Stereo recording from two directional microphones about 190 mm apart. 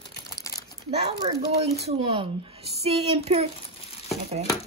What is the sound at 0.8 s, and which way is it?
Speech, 35° right (ahead or behind).